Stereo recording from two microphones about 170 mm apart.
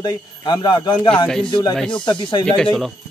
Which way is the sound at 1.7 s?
5° left (ahead or behind).